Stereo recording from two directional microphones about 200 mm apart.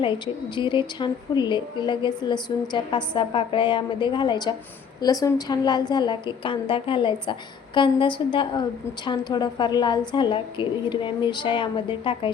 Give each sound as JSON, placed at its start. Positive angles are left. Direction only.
{"t": 0.0, "sound": "a woman's voice", "side_deg": 25}